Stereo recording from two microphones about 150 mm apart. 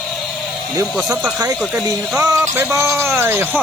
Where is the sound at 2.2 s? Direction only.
20° right (ahead or behind).